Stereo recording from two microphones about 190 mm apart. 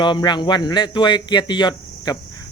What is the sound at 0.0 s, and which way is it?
Speech, 25° left (ahead or behind).